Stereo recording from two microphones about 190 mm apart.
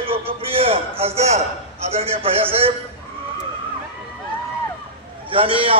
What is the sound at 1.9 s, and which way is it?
Speech, 30° right (ahead or behind).